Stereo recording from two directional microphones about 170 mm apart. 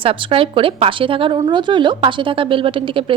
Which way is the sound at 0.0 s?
30° right (ahead or behind).